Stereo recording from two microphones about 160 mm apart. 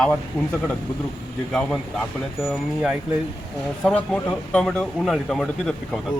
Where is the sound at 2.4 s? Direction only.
Centre (ahead or behind).